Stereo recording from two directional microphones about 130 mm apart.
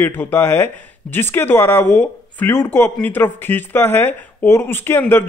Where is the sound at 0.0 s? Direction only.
15° left (ahead or behind).